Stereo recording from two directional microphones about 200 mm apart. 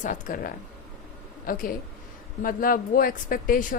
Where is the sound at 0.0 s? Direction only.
40° left (ahead or behind).